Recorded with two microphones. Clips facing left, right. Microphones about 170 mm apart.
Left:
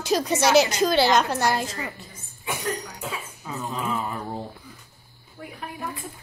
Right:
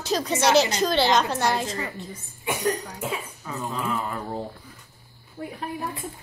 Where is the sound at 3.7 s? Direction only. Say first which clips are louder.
Even; 20° left (ahead or behind).